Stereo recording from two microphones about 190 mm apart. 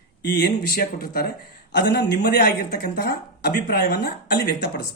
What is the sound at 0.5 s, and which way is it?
Speech, 50° left (ahead or behind).